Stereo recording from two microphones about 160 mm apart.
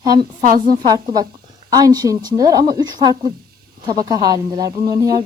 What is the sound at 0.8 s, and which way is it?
A woman's voice, 25° right (ahead or behind).